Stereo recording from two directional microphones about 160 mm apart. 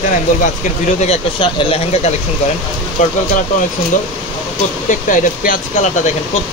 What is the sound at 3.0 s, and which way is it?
Speech, 50° left (ahead or behind).